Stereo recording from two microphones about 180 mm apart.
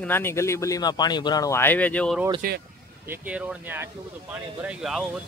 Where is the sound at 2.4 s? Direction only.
55° right (ahead or behind).